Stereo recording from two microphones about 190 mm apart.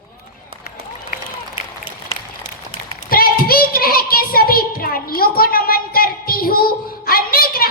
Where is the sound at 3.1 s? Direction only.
50° left (ahead or behind).